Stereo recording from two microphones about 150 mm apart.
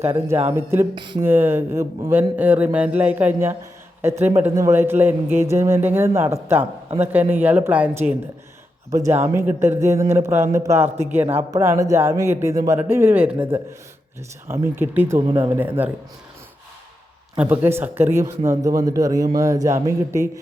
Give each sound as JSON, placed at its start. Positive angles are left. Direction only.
{"t": 0.0, "sound": "a man's voice", "side_deg": -15}
{"t": 0.9, "sound": "speech", "side_deg": -30}
{"t": 1.2, "sound": "a man's voice", "side_deg": -15}
{"t": 8.9, "sound": "a man's voice", "side_deg": -20}
{"t": 17.3, "sound": "a man's voice", "side_deg": -10}